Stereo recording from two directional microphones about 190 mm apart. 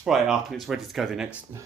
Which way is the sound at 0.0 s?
Centre (ahead or behind).